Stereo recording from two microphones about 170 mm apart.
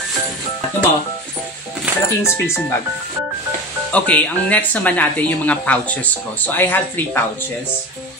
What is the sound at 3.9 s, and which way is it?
Speech, 10° left (ahead or behind).